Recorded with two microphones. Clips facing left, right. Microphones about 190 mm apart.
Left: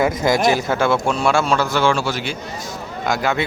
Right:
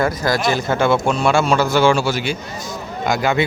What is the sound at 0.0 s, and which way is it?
Speech, 20° left (ahead or behind).